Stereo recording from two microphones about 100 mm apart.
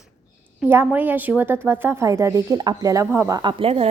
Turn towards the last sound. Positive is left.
turn(degrees=-70)  # may be behind; listen again after turning